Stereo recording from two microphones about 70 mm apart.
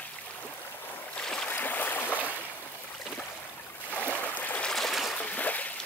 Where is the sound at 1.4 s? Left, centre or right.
Left.